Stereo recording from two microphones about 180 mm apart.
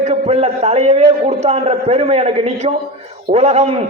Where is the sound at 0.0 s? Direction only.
35° right (ahead or behind).